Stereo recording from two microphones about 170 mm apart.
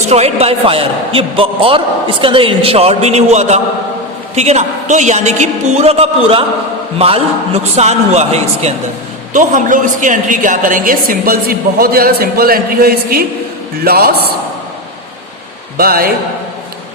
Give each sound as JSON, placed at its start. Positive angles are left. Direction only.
{"t": 0.1, "sound": "a man's voice", "side_deg": -40}
{"t": 9.3, "sound": "a woman's voice", "side_deg": -50}
{"t": 15.8, "sound": "a woman's voice", "side_deg": -60}